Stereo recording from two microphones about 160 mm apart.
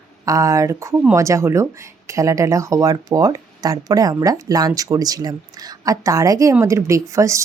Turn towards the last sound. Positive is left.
turn(degrees=-20)  # may be behind; listen again after turning